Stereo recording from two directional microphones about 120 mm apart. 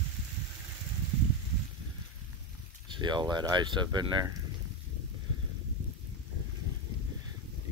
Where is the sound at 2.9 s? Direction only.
40° right (ahead or behind).